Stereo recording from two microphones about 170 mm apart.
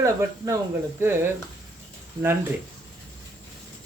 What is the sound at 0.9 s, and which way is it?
Speech, 15° right (ahead or behind).